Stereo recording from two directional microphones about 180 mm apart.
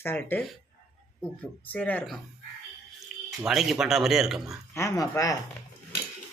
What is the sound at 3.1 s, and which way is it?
Drip, centre (ahead or behind).